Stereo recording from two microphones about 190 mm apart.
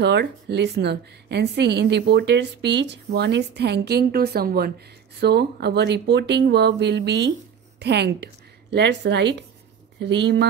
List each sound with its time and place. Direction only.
0.0 s a woman's voice: 65° right (ahead or behind)